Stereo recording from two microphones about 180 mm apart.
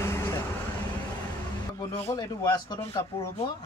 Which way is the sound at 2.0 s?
20° left (ahead or behind).